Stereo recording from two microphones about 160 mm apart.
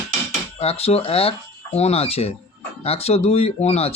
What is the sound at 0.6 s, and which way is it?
Speech, 40° left (ahead or behind).